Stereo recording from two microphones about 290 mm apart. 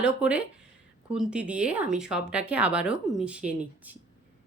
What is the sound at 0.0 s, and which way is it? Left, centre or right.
Speech, centre.